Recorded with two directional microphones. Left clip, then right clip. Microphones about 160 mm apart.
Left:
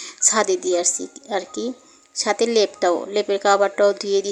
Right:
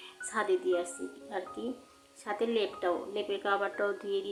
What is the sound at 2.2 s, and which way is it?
Speech, 45° left (ahead or behind).